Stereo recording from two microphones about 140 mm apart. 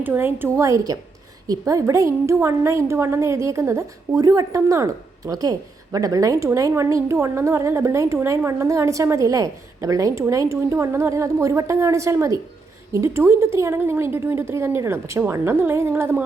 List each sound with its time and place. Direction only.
0.0 s a woman's voice: 15° right (ahead or behind)